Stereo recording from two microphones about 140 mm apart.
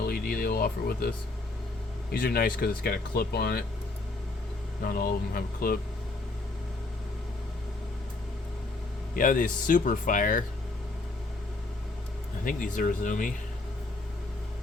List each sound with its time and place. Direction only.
0.0 s music: 90° left
2.1 s speech: 90° left
4.8 s speech: 90° left
9.1 s speech: 75° left (ahead or behind)
12.5 s speech: 70° left (ahead or behind)